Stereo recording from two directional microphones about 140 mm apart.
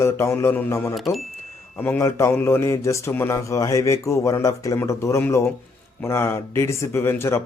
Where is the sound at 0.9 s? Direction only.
Centre (ahead or behind).